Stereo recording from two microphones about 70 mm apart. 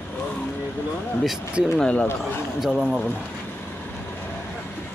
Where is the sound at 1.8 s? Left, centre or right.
Centre.